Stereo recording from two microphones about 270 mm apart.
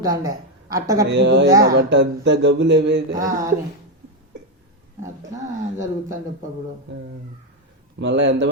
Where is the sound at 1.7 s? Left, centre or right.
Right.